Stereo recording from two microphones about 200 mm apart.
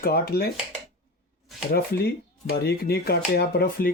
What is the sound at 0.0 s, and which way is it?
Speech, 50° left (ahead or behind).